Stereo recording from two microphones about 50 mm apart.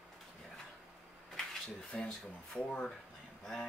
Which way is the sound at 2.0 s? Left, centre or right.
Centre.